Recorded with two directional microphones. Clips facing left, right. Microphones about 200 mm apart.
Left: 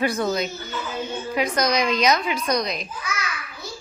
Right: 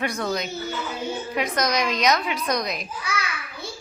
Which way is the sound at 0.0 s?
Centre (ahead or behind).